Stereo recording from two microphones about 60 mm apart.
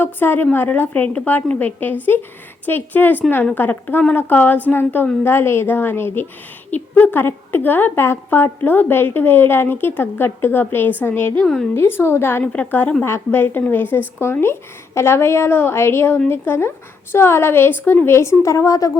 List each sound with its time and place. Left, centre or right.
0.0 s a woman's voice: left
6.7 s a woman's voice: left
11.3 s a woman's voice: centre
11.7 s a woman's voice: left
12.4 s a woman's voice: left
13.1 s a woman's voice: left